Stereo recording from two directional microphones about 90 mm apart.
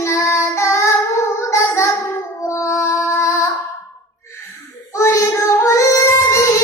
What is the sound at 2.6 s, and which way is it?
Music, 30° left (ahead or behind).